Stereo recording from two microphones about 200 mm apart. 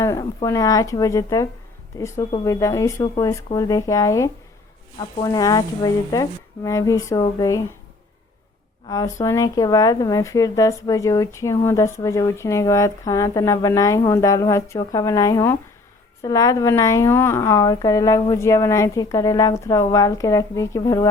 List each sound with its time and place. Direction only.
0.0 s speech: 15° left (ahead or behind)
8.9 s speech: 15° left (ahead or behind)